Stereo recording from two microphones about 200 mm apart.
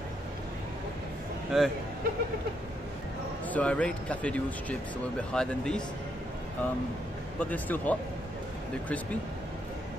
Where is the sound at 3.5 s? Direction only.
5° left (ahead or behind).